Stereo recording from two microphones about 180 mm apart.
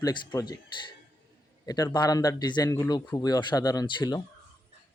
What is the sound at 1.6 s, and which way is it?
Speech, 20° left (ahead or behind).